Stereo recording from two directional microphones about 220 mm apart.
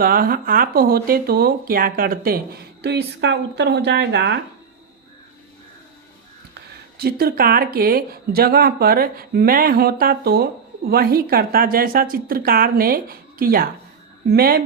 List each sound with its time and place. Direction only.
0.0 s speech: 40° right (ahead or behind)
6.5 s speech: 45° right (ahead or behind)